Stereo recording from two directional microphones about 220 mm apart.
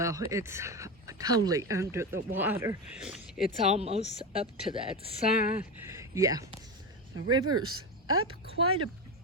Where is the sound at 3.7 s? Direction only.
30° right (ahead or behind).